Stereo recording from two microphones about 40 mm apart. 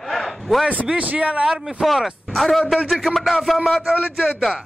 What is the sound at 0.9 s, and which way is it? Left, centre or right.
Speech, right.